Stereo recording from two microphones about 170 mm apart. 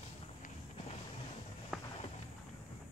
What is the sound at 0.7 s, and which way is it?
Music, 35° left (ahead or behind).